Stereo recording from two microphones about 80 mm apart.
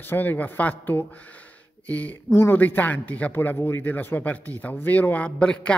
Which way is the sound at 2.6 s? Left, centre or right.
Left.